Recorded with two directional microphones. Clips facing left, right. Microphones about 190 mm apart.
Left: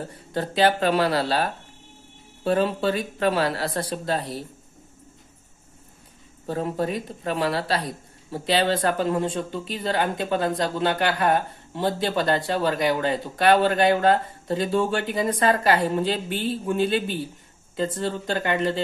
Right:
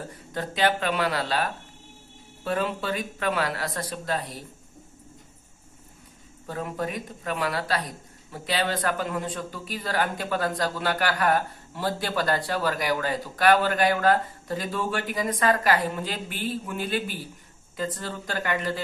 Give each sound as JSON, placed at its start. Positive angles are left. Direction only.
{"t": 0.3, "sound": "speech", "side_deg": 30}
{"t": 6.4, "sound": "a man's voice", "side_deg": 30}